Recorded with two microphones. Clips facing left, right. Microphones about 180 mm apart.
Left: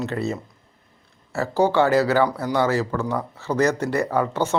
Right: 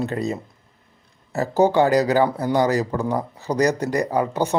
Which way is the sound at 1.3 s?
20° right (ahead or behind).